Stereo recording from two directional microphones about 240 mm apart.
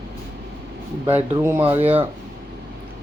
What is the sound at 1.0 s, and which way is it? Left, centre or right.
Speech, centre.